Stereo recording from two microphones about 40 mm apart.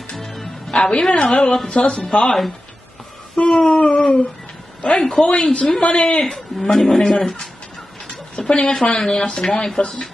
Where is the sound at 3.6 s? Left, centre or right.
Left.